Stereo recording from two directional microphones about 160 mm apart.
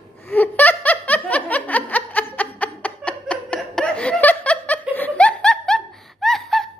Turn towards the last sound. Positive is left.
turn(degrees=0)  # may be behind; listen again after turning